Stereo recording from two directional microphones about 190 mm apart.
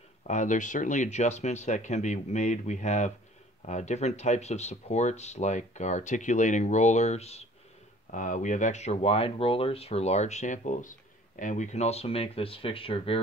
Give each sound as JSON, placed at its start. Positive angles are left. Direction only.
{"t": 0.3, "sound": "speech", "side_deg": 40}